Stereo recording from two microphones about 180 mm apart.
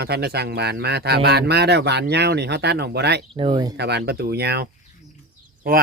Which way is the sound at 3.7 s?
65° right (ahead or behind).